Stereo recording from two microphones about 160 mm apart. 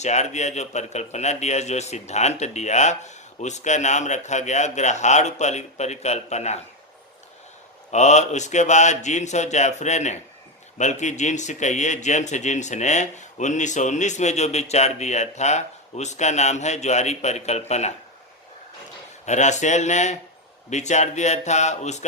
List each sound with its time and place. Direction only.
0.0 s speech: 45° left (ahead or behind)
7.9 s speech: 45° left (ahead or behind)
19.2 s speech: 45° left (ahead or behind)